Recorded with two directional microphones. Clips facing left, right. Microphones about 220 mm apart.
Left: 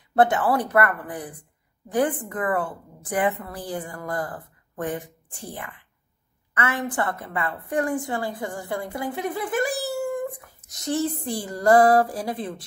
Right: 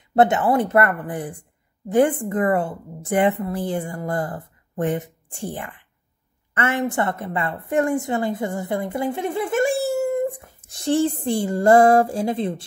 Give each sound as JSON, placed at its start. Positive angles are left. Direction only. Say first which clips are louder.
{"t": 0.1, "sound": "a woman's voice", "louder": "right 3 dB", "side_deg": -25}